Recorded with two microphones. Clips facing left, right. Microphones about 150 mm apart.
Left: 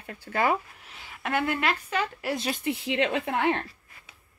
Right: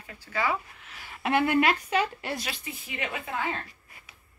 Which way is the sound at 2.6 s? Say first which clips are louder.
Left 10 dB; 75° left (ahead or behind).